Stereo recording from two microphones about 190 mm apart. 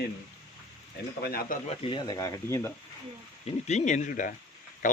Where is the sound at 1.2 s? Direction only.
50° left (ahead or behind).